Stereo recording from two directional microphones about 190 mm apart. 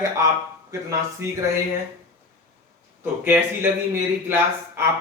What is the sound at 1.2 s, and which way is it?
Speech, 15° right (ahead or behind).